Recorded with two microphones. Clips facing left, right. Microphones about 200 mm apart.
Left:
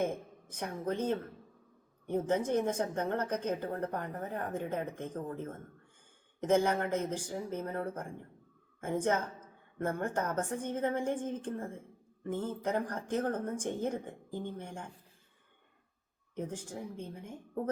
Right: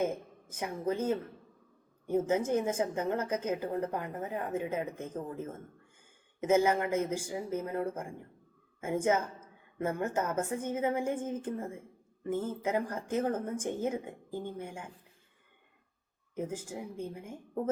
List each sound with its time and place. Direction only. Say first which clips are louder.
0.0 s a woman's voice: right 1 dB; 5° right (ahead or behind)
16.3 s a woman's voice: right 2 dB; 5° right (ahead or behind)